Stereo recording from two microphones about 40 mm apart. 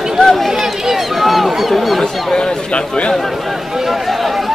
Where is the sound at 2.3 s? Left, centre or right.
Centre.